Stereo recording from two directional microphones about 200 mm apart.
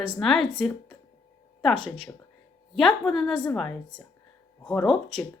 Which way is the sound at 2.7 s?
Centre (ahead or behind).